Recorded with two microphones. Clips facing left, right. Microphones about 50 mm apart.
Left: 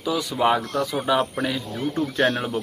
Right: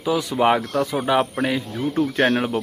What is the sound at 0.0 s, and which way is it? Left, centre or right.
Speech, right.